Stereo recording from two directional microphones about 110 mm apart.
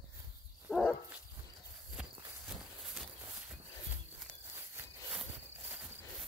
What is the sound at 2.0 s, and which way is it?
Walk, 10° right (ahead or behind).